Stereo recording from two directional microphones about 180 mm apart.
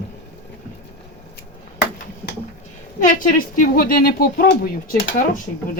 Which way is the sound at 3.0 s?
50° left (ahead or behind).